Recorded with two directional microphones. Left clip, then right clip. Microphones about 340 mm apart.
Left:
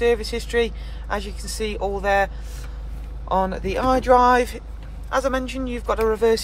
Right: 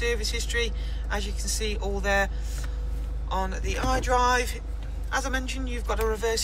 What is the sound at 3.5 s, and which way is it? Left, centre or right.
Speech, centre.